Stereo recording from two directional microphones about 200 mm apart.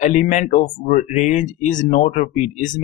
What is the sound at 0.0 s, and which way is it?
Speech, 40° left (ahead or behind).